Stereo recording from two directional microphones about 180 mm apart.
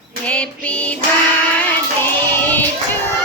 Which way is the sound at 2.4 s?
10° left (ahead or behind).